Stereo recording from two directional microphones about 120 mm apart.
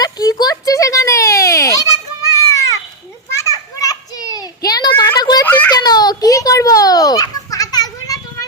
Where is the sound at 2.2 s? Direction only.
25° left (ahead or behind).